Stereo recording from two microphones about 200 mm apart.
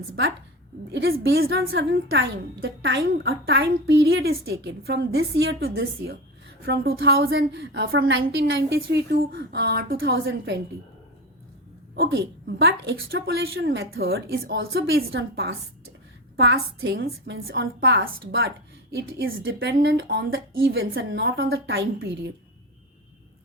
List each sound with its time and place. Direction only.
0.9 s a woman's voice: 65° right (ahead or behind)
1.6 s a woman's voice: 65° right (ahead or behind)
11.9 s a woman's voice: 55° right (ahead or behind)
13.4 s a woman's voice: 70° right (ahead or behind)
13.9 s a woman's voice: 50° right (ahead or behind)
15.1 s a woman's voice: 70° right (ahead or behind)
16.4 s a woman's voice: 60° right (ahead or behind)
19.5 s a woman's voice: 65° right (ahead or behind)